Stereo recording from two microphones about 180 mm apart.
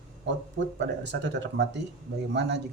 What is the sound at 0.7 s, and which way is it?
Speech, 80° right.